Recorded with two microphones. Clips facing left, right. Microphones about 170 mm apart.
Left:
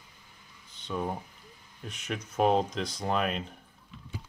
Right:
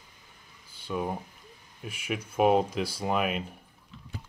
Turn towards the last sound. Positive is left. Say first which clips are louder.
# right 1 dB
turn(degrees=-5)  # may be behind; listen again after turning